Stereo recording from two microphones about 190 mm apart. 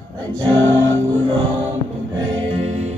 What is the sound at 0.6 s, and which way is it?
Music, 85° right.